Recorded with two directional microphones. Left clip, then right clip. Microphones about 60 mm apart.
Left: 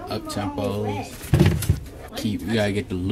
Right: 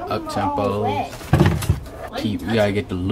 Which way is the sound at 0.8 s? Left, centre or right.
Right.